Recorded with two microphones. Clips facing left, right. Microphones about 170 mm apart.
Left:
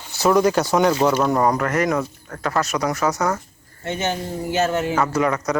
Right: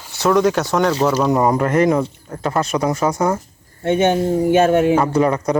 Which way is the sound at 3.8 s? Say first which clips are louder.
Right 9 dB; 55° right (ahead or behind).